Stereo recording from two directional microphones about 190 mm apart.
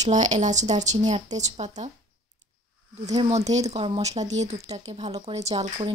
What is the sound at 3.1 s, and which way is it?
Speech, 35° right (ahead or behind).